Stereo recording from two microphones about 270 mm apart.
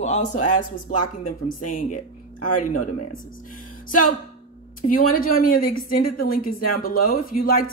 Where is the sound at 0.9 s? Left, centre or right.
Left.